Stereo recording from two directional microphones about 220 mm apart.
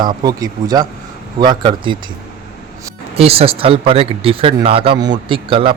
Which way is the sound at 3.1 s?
25° right (ahead or behind).